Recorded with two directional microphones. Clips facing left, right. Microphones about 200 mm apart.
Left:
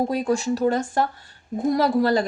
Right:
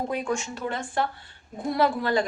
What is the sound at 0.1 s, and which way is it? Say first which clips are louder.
A woman's voice: left 6 dB; 35° left (ahead or behind).